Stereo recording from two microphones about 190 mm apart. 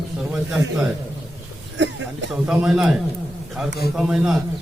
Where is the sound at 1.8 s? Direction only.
75° right (ahead or behind).